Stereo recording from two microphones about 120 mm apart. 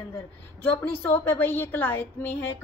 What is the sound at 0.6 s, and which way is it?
Speech, 20° left (ahead or behind).